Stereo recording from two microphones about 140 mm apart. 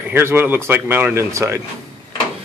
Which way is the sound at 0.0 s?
15° right (ahead or behind).